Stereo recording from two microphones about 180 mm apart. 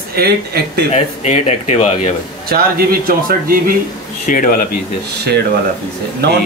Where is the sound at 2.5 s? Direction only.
55° right (ahead or behind).